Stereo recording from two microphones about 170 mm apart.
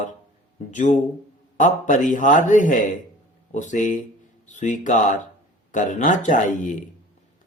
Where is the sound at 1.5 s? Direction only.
50° left (ahead or behind).